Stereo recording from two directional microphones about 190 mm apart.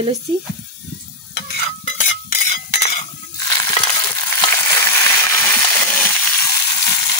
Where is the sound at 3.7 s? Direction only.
20° left (ahead or behind).